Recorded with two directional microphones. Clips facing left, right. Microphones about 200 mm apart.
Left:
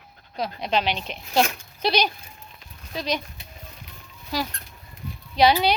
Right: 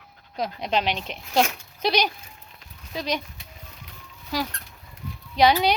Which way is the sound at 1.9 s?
15° right (ahead or behind).